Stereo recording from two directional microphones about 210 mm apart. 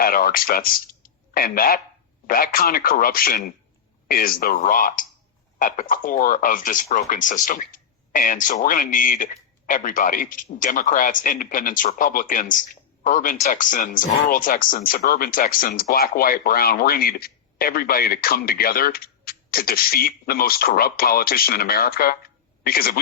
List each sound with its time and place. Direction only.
0.0 s speech: 45° left (ahead or behind)